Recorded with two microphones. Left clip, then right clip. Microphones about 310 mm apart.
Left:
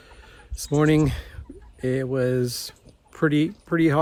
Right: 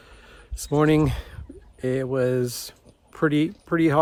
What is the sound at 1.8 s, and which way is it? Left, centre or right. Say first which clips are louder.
Speech: right 1 dB; centre.